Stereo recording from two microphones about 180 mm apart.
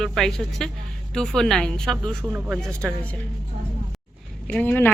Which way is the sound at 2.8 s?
5° left (ahead or behind).